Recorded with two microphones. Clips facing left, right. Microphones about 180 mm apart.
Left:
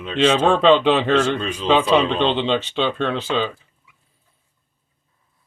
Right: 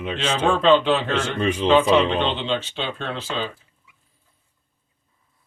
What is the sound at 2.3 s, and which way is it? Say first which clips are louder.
Speech: left 5 dB; 80° left.